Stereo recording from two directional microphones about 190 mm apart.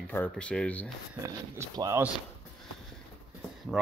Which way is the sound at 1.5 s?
15° right (ahead or behind).